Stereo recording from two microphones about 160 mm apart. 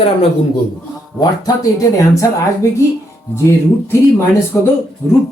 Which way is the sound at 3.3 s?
15° left (ahead or behind).